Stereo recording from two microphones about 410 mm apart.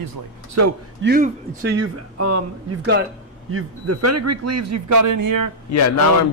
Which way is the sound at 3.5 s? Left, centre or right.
Right.